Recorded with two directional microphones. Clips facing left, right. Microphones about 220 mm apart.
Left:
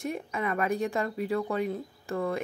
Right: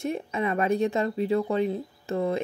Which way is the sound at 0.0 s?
25° right (ahead or behind).